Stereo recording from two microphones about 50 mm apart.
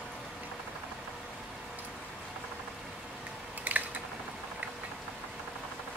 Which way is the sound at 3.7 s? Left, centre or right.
Right.